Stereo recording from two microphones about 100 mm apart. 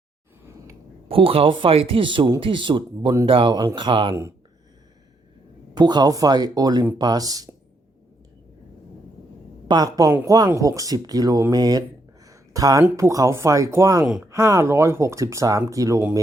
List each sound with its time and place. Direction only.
1.0 s speech: 65° right (ahead or behind); by 3.2 s 50° right (ahead or behind)
3.2 s speech: 65° right (ahead or behind)
4.1 s speech: 30° right (ahead or behind)
5.7 s speech: 45° right (ahead or behind)
9.6 s speech: 40° right (ahead or behind)
12.2 s a sound: 35° right (ahead or behind)
13.0 s speech: 30° right (ahead or behind)
14.0 s speech: 10° right (ahead or behind)
14.3 s speech: 30° right (ahead or behind)